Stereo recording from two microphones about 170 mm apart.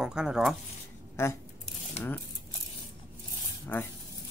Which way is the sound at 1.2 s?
15° left (ahead or behind).